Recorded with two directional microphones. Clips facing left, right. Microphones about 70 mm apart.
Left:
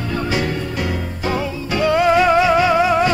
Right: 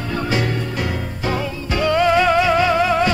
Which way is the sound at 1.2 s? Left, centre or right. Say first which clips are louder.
Left 1 dB; centre.